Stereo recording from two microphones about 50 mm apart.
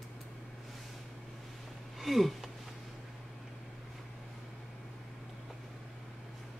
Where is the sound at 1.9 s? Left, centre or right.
Centre.